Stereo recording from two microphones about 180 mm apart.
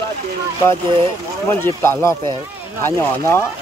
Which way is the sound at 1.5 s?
15° left (ahead or behind).